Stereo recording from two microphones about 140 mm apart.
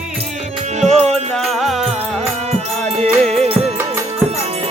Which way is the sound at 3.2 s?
5° left (ahead or behind).